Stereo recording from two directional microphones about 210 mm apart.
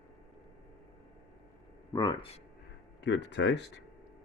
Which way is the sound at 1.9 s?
20° left (ahead or behind).